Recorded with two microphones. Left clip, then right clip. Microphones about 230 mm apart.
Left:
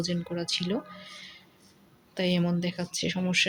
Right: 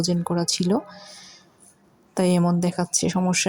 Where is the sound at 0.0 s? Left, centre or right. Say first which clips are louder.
Right 8 dB; right.